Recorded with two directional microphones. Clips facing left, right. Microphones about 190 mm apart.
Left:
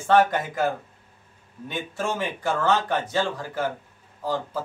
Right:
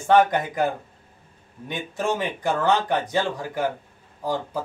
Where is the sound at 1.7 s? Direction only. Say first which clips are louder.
Right 3 dB; 15° right (ahead or behind).